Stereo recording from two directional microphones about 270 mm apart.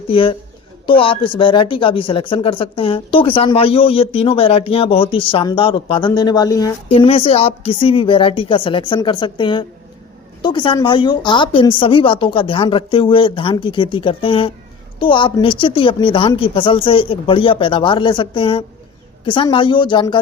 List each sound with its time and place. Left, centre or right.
0.1 s a woman's voice: centre